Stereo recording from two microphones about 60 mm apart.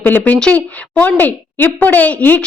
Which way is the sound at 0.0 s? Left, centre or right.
Left.